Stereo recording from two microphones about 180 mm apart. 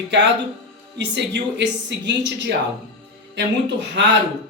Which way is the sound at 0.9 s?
75° right (ahead or behind).